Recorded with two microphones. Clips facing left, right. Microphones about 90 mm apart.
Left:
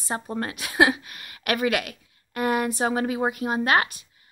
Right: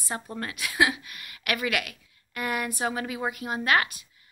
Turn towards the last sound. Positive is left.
turn(degrees=30)  # may be behind; listen again after turning